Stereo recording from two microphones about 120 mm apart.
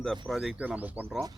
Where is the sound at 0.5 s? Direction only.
10° right (ahead or behind).